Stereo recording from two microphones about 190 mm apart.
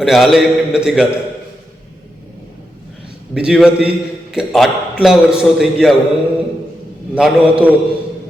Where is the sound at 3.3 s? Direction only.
5° right (ahead or behind).